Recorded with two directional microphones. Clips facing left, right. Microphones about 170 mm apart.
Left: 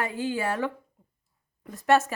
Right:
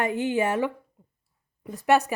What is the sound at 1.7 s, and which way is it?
Speech, 15° right (ahead or behind).